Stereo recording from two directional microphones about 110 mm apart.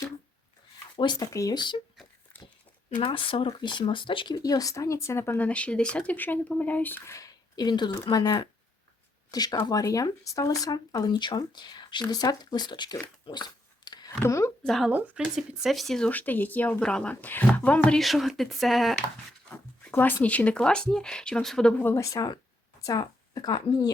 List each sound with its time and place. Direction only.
0.9 s speech: 40° left (ahead or behind)
1.3 s speech: 30° left (ahead or behind)
1.5 s speech: 45° left (ahead or behind)
3.0 s speech: 50° left (ahead or behind)
4.4 s speech: 35° left (ahead or behind)
7.5 s speech: 40° left (ahead or behind)
14.2 s speech: 25° left (ahead or behind)
14.6 s speech: 5° left (ahead or behind)
14.8 s speech: 10° right (ahead or behind); by 18.0 s 10° left (ahead or behind)
18.0 s speech: centre (ahead or behind)
19.8 s a sound: 15° left (ahead or behind)
20.2 s speech: 15° left (ahead or behind)
21.8 s speech: 20° left (ahead or behind)